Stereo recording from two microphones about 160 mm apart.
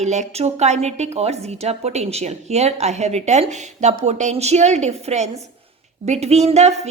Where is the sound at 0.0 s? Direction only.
45° right (ahead or behind).